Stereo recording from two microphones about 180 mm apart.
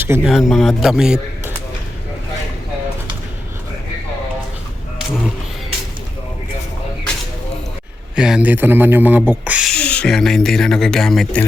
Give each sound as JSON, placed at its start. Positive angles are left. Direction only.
{"t": 0.0, "sound": "speech", "side_deg": -10}
{"t": 8.1, "sound": "speech", "side_deg": -5}
{"t": 9.7, "sound": "speech", "side_deg": 5}